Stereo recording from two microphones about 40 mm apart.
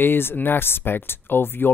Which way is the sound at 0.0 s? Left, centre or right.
Left.